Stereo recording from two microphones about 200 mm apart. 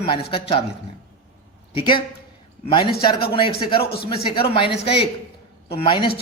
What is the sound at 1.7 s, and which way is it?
A man's voice, 25° left (ahead or behind).